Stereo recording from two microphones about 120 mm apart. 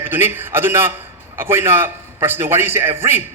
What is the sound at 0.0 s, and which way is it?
A man's voice, 20° right (ahead or behind).